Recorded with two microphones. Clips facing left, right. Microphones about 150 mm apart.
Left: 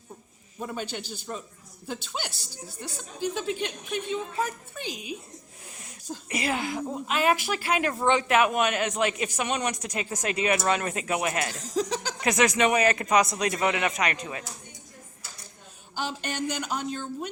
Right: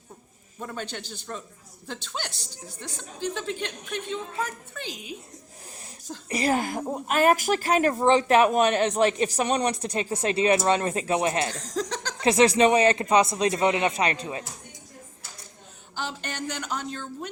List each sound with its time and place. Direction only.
0.6 s a woman's voice: 15° left (ahead or behind)
6.2 s speech: 40° right (ahead or behind)
11.5 s a woman's voice: 10° left (ahead or behind)
12.2 s speech: 30° right (ahead or behind)
16.0 s a woman's voice: 15° left (ahead or behind)